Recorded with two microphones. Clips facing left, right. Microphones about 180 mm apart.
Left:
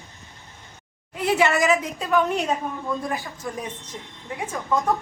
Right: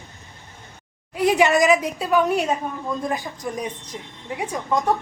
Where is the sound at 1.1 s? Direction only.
15° right (ahead or behind).